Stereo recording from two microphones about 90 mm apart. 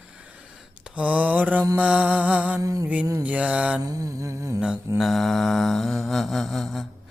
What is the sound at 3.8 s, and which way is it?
Humming, 40° right (ahead or behind).